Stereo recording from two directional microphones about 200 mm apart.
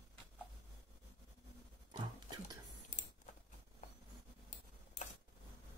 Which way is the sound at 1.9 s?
20° right (ahead or behind).